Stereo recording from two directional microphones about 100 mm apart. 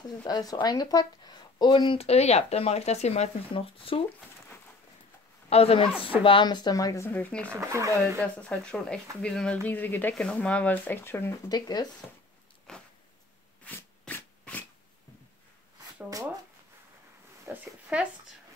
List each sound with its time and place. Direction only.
0.2 s speech: 40° left (ahead or behind)
2.0 s speech: 90° left; by 4.0 s 65° left (ahead or behind)
5.5 s a man's voice: 85° left; by 6.1 s 65° left (ahead or behind)
6.2 s speech: 50° left (ahead or behind); by 7.1 s 35° left (ahead or behind)
7.1 s speech: 15° left (ahead or behind)
7.5 s speech: 30° right (ahead or behind)
8.4 s speech: 10° left (ahead or behind)
11.4 s speech: 40° left (ahead or behind)
12.7 s a sound: 5° left (ahead or behind)
17.5 s speech: 25° right (ahead or behind)